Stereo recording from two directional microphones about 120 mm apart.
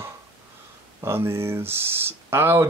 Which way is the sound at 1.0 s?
20° right (ahead or behind).